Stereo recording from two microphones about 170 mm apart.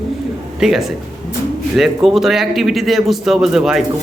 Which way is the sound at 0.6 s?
Centre (ahead or behind).